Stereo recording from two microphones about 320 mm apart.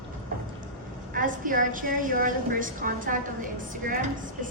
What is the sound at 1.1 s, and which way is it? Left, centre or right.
A woman's voice, right.